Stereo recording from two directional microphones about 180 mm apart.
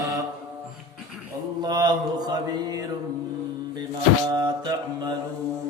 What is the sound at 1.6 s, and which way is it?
Mantra, 25° right (ahead or behind).